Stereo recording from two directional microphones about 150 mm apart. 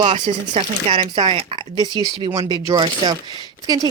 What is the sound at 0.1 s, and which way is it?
Speech, 45° right (ahead or behind).